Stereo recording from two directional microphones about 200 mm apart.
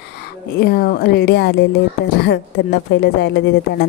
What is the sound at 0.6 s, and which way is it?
A woman's voice, 50° left (ahead or behind).